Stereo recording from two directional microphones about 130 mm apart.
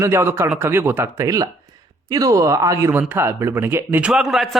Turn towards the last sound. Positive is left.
turn(degrees=0)  # may be behind; listen again after turning